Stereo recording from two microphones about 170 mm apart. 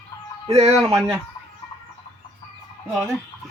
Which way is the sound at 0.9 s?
15° right (ahead or behind).